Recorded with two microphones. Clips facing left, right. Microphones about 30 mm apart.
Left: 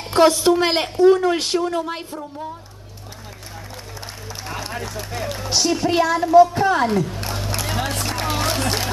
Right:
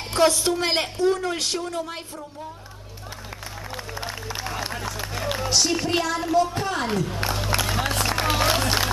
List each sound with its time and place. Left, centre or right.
0.1 s a woman's voice: centre
4.5 s run: centre
5.5 s speech: centre
7.2 s speech: centre
7.6 s run: centre